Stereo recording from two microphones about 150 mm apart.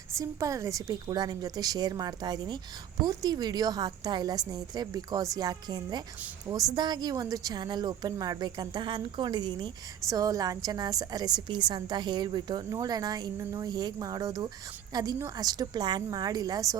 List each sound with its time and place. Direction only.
0.1 s a woman's voice: 20° right (ahead or behind)